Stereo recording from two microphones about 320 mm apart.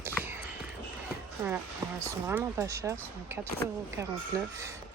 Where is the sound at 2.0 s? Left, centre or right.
Centre.